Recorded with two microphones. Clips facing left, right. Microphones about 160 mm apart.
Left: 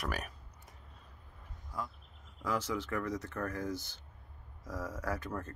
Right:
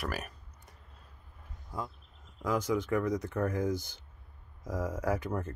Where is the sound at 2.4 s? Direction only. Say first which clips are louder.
Right 5 dB; 10° right (ahead or behind).